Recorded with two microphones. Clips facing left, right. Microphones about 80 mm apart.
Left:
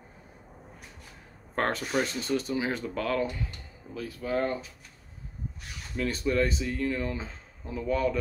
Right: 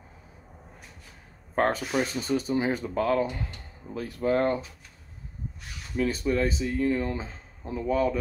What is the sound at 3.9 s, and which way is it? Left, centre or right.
Speech, right.